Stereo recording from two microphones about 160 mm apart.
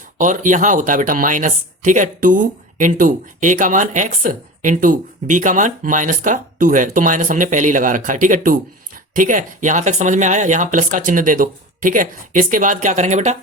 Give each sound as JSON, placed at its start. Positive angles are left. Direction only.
{"t": 0.2, "sound": "speech", "side_deg": -55}